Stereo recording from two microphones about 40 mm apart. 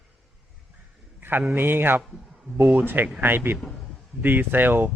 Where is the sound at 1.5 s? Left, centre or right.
Right.